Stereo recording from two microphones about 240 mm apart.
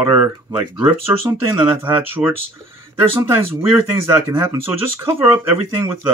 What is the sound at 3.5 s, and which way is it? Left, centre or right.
A man's voice, centre.